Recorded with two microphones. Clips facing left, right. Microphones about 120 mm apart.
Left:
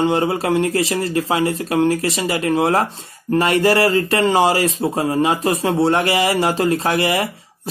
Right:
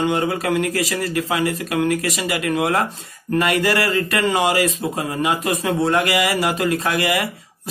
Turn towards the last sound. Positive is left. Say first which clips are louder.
# left 2 dB
turn(degrees=30)  # may be behind; listen again after turning